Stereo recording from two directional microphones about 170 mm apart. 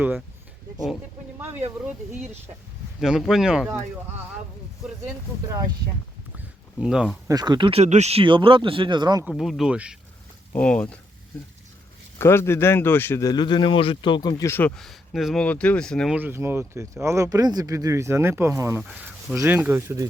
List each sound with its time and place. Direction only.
1.4 s speech: 10° right (ahead or behind)
3.0 s speech: centre (ahead or behind)
6.7 s speech: 5° right (ahead or behind)
7.3 s speech: 25° right (ahead or behind)
9.3 s speech: centre (ahead or behind)
10.5 s speech: 5° left (ahead or behind)
12.2 s speech: 15° left (ahead or behind)
14.8 s speech: centre (ahead or behind)
16.1 s speech: 10° right (ahead or behind)
18.8 s speech: 5° right (ahead or behind)